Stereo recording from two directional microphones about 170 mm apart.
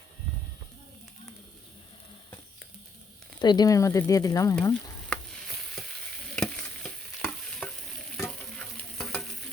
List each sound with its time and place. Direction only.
3.4 s speech: 25° left (ahead or behind)
4.5 s frying: 5° left (ahead or behind)
6.3 s stir: 5° left (ahead or behind)